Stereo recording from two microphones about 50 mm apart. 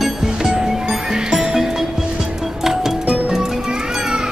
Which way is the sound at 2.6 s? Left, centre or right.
Centre.